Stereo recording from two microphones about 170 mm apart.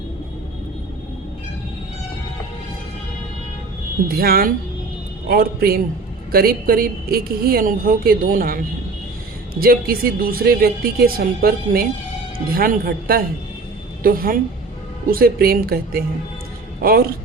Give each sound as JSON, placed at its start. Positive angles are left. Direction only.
{"t": 4.1, "sound": "a woman's voice", "side_deg": -60}